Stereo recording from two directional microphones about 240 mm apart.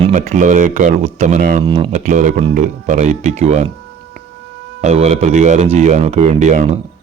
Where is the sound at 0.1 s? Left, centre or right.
Right.